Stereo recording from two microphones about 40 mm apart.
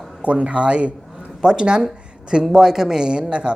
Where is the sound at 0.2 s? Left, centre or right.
Right.